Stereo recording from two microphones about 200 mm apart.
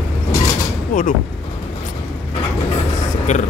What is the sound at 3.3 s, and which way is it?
Speech, 35° left (ahead or behind).